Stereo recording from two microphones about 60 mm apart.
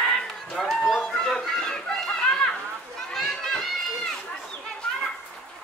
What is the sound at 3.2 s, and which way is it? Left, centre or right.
Children playing, centre.